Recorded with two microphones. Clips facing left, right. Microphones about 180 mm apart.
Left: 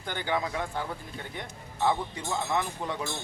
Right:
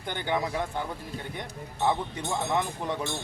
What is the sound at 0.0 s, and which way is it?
Speech, 20° right (ahead or behind).